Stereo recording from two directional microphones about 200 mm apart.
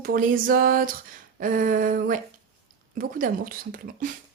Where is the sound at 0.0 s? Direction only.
45° right (ahead or behind).